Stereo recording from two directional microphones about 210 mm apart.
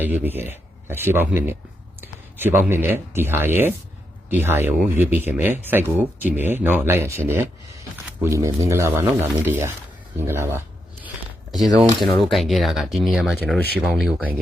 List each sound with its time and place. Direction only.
0.0 s speech: 10° right (ahead or behind)
11.9 s speech: centre (ahead or behind)